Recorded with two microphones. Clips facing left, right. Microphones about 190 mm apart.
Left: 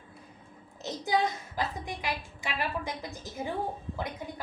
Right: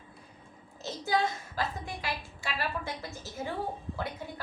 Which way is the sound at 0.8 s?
20° left (ahead or behind).